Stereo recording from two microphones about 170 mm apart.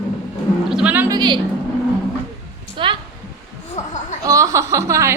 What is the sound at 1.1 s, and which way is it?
Speech, 25° right (ahead or behind).